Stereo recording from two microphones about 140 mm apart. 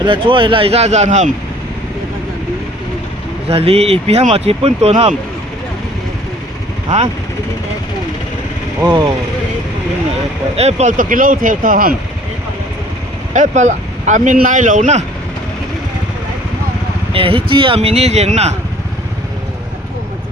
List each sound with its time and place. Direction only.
0.0 s speech: 35° right (ahead or behind); by 1.3 s 55° right (ahead or behind)
3.5 s speech: 45° right (ahead or behind)
6.9 s speech: 55° right (ahead or behind)
10.6 s speech: 50° right (ahead or behind)
10.9 s speech: 75° right (ahead or behind)
13.3 s speech: 60° right (ahead or behind)
17.1 s speech: 40° right (ahead or behind)